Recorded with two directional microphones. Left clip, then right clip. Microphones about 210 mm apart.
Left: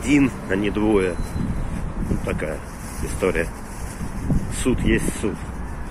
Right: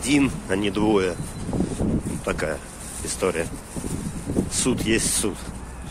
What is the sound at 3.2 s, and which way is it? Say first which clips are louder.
Speech: left 2 dB; 15° right (ahead or behind).